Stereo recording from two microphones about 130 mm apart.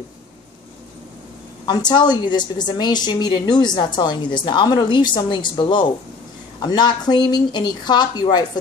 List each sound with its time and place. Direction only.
1.7 s a woman's voice: 35° left (ahead or behind)